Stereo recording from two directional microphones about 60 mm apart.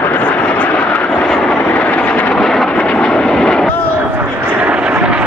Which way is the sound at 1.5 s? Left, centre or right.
Left.